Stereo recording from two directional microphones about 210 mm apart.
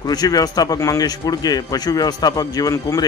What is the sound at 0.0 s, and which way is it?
A man's voice, 20° left (ahead or behind).